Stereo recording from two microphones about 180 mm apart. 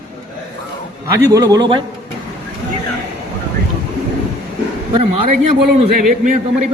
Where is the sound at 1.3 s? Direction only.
20° right (ahead or behind).